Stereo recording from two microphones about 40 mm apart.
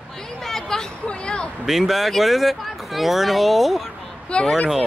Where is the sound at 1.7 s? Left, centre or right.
Centre.